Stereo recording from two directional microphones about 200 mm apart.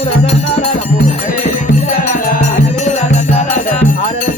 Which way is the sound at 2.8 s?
35° left (ahead or behind).